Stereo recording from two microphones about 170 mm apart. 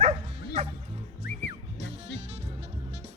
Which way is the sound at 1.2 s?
80° left.